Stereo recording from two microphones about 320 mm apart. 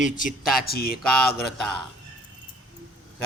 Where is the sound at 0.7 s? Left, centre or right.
Left.